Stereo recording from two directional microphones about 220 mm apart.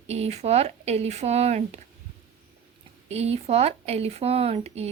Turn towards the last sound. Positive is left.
turn(degrees=-30)  # may be behind; listen again after turning